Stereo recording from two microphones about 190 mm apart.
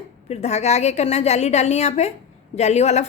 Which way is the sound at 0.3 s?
35° left (ahead or behind).